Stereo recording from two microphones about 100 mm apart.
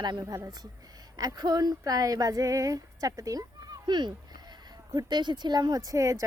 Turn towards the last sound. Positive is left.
turn(degrees=-35)  # may be behind; listen again after turning